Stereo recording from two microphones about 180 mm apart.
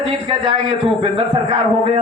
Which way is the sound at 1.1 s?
30° right (ahead or behind).